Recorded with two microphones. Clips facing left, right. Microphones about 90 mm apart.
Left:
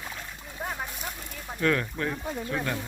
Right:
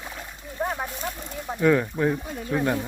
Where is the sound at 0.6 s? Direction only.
20° right (ahead or behind).